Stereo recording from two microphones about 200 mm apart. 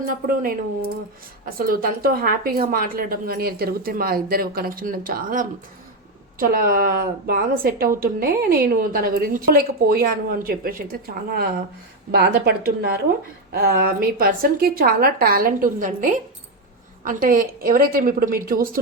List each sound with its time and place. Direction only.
0.0 s a woman's voice: 45° right (ahead or behind)